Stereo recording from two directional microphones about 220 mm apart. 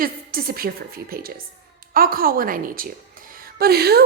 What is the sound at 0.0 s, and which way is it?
A woman's voice, 40° right (ahead or behind).